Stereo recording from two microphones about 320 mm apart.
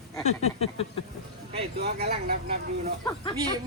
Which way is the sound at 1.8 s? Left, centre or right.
Right.